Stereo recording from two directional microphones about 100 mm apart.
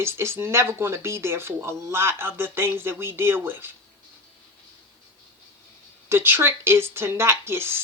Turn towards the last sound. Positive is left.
turn(degrees=-25)  # may be behind; listen again after turning